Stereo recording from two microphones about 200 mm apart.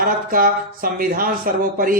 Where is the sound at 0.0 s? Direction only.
45° right (ahead or behind).